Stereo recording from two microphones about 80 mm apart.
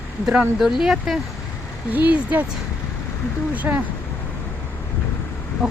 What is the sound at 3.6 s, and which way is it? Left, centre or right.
Speech, right.